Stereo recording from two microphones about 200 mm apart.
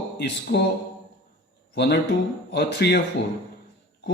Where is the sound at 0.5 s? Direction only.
55° left (ahead or behind).